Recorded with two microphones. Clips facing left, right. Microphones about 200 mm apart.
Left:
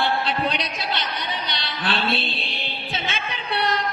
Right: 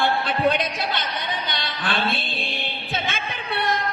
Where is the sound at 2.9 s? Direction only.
50° right (ahead or behind).